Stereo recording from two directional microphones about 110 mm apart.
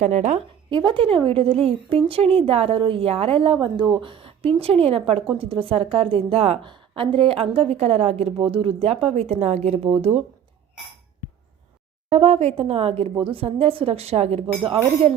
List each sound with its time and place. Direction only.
0.0 s speech: 90° right
0.7 s a woman's voice: 45° right (ahead or behind); by 6.7 s 65° right (ahead or behind)
6.7 s a woman's voice: 55° right (ahead or behind); by 8.3 s 75° right (ahead or behind)
8.4 s speech: 55° right (ahead or behind); by 9.9 s 90° right
12.0 s a woman's voice: 85° right